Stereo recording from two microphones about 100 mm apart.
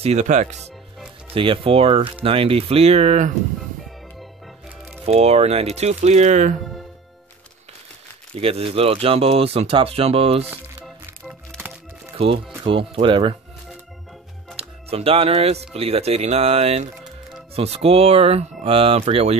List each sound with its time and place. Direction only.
0.0 s speech: 90° right
1.3 s speech: 60° right (ahead or behind); by 3.2 s 90° right
5.0 s speech: 90° right
8.4 s speech: 75° right (ahead or behind)
10.5 s music: 10° right (ahead or behind)
12.6 s speech: 65° right (ahead or behind)
14.6 s speech: 75° right (ahead or behind)